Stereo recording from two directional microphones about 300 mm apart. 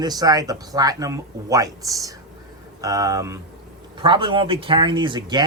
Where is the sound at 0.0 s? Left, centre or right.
Centre.